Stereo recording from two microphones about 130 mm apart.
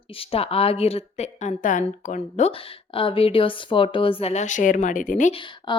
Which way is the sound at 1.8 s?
65° left (ahead or behind).